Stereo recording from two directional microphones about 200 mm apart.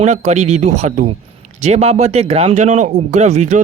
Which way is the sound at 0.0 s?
35° right (ahead or behind).